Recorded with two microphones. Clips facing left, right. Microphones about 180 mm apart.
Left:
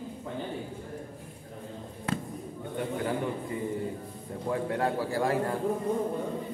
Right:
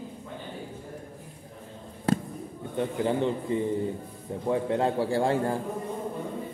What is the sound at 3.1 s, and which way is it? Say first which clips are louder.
A man's voice: right 5 dB; 25° right (ahead or behind).